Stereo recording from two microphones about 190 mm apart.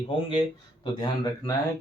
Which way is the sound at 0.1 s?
30° left (ahead or behind).